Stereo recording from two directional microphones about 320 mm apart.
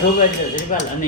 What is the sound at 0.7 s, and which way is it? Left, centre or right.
Speech, left.